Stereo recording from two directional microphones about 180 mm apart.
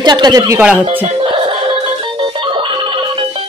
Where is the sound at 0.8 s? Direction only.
30° right (ahead or behind).